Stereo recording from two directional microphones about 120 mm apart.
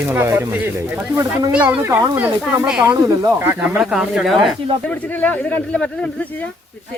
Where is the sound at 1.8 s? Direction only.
25° right (ahead or behind).